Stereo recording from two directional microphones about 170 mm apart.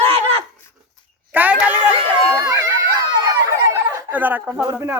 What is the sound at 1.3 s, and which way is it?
Speech, 10° right (ahead or behind).